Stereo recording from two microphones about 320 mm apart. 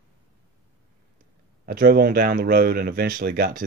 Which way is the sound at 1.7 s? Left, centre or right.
Right.